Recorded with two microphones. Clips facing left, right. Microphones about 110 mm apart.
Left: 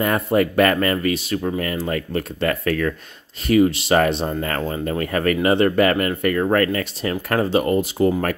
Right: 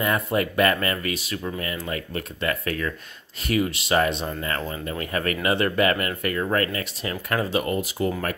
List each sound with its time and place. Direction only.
0.0 s speech: 40° left (ahead or behind)
4.2 s speech: 40° left (ahead or behind)